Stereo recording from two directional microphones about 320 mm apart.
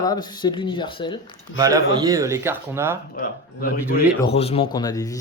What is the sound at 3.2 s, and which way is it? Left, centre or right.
A man's voice, left.